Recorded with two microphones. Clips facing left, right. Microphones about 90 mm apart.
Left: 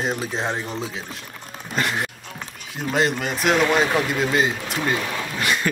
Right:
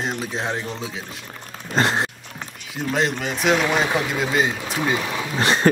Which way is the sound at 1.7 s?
30° right (ahead or behind).